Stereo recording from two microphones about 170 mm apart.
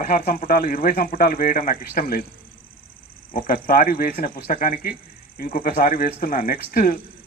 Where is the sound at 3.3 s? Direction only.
55° left (ahead or behind).